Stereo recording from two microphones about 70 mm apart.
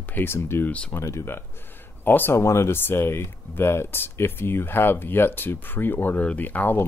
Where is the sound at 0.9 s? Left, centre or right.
Left.